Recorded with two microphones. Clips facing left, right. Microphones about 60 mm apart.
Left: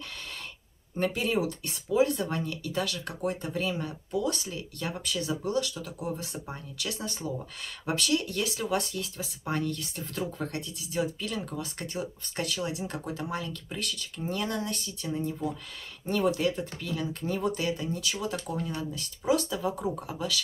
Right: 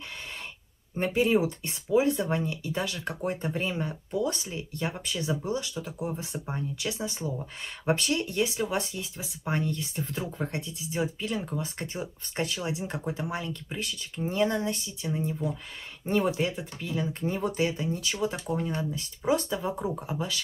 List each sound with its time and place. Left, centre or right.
0.9 s speech: right
7.8 s speech: right